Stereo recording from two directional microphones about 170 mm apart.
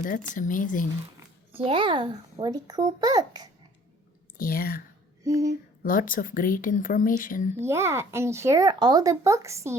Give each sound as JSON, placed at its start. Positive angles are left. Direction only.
{"t": 0.0, "sound": "speech", "side_deg": 50}
{"t": 1.5, "sound": "a child's voice", "side_deg": -30}
{"t": 4.4, "sound": "speech", "side_deg": 60}
{"t": 5.2, "sound": "a child's voice", "side_deg": -20}
{"t": 5.8, "sound": "speech", "side_deg": 55}
{"t": 7.6, "sound": "a child's voice", "side_deg": -15}